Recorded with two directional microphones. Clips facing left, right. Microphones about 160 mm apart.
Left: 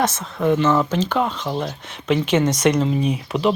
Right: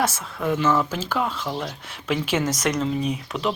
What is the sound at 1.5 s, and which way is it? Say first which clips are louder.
Speech: left 4 dB; 5° left (ahead or behind).